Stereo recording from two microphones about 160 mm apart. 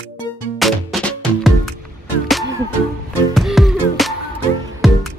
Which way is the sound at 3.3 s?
Centre (ahead or behind).